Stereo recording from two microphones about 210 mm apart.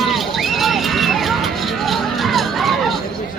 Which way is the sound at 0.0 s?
Centre (ahead or behind).